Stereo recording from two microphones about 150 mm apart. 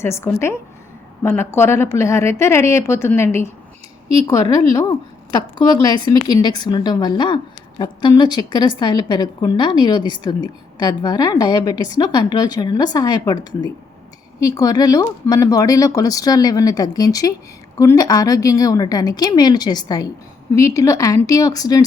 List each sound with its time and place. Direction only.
0.0 s a woman's voice: 15° left (ahead or behind)